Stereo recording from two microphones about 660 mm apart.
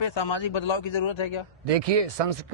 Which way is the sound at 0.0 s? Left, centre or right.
Left.